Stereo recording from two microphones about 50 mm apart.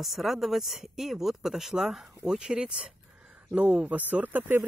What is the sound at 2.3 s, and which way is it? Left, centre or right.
Speech, centre.